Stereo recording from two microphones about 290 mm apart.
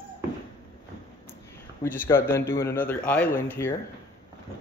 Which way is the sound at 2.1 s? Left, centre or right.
Centre.